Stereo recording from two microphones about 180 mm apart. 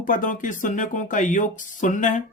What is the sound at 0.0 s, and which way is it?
Speech, 45° left (ahead or behind).